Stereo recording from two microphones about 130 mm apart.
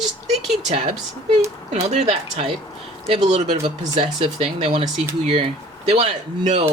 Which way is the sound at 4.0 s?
45° right (ahead or behind).